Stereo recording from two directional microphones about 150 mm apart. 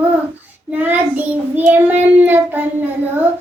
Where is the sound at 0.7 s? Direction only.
10° right (ahead or behind).